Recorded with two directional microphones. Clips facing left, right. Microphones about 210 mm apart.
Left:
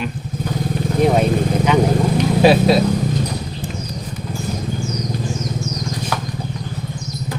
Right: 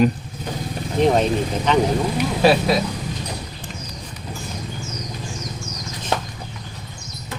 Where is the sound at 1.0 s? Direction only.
10° left (ahead or behind).